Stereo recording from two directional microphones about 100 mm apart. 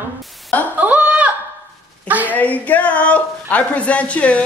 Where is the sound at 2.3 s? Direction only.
15° left (ahead or behind).